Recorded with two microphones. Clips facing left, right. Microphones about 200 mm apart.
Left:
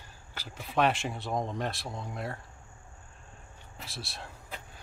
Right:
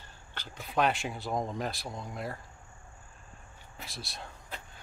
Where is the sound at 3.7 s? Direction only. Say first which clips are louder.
Left 1 dB; centre (ahead or behind).